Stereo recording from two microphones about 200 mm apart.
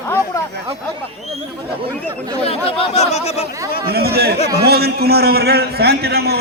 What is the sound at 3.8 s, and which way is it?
A man's voice, 50° right (ahead or behind).